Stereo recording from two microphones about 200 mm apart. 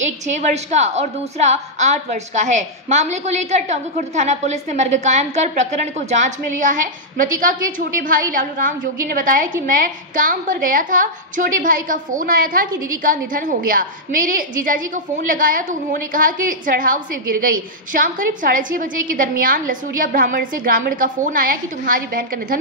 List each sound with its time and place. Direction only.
0.0 s a woman's voice: 35° right (ahead or behind)